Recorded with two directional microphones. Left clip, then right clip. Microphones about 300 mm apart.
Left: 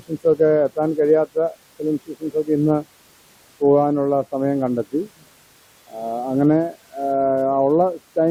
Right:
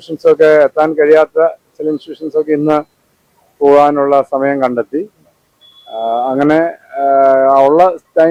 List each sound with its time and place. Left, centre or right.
0.3 s speech: centre
5.9 s speech: right